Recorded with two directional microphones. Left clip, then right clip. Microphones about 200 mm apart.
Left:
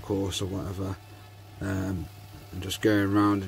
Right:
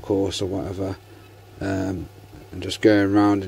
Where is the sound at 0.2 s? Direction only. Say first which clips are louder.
Right 7 dB; 15° left (ahead or behind).